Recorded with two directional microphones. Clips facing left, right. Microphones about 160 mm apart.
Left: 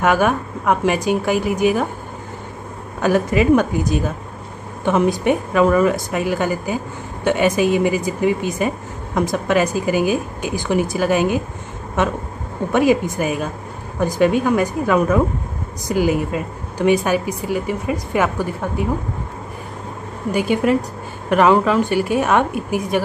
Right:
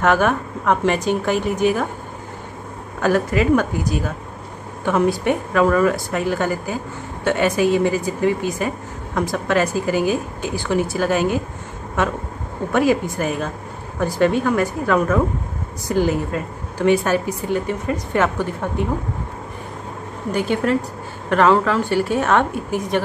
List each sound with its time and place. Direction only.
0.0 s speech: 10° left (ahead or behind)
3.0 s speech: 15° left (ahead or behind)
20.2 s speech: 10° left (ahead or behind)